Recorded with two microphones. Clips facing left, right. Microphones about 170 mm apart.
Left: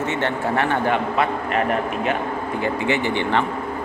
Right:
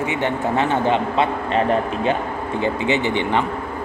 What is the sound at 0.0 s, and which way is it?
A man's voice, 15° right (ahead or behind).